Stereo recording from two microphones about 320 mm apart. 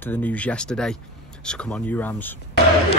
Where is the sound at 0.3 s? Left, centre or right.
Centre.